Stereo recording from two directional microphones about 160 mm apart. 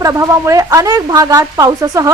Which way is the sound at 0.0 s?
20° right (ahead or behind).